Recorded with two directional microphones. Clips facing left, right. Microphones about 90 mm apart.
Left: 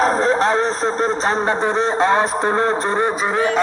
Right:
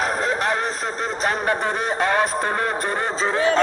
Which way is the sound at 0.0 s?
30° left (ahead or behind).